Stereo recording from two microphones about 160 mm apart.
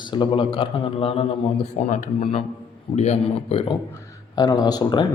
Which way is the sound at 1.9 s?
50° left (ahead or behind).